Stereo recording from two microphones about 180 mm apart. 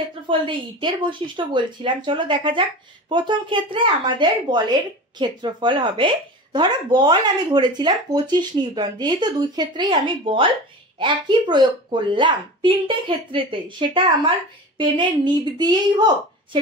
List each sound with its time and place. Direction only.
0.3 s speech: 25° right (ahead or behind)